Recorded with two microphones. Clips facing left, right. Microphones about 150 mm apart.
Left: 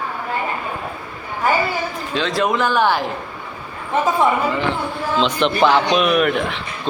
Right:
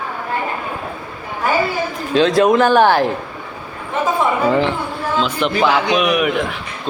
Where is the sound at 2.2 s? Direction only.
45° right (ahead or behind).